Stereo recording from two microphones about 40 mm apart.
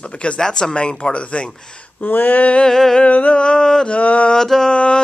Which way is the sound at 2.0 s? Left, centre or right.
Left.